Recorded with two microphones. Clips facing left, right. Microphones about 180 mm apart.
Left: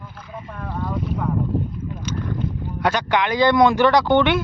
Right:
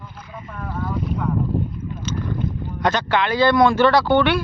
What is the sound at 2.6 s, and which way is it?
Speech, 10° left (ahead or behind).